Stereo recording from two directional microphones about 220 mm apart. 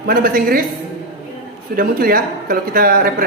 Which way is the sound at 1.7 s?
40° right (ahead or behind).